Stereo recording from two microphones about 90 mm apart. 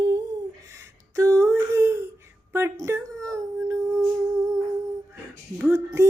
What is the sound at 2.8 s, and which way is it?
Whimper, 35° right (ahead or behind).